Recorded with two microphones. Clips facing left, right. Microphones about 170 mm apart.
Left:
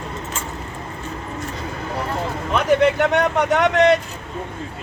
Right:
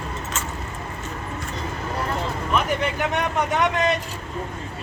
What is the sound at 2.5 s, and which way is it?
Speech, 70° left (ahead or behind).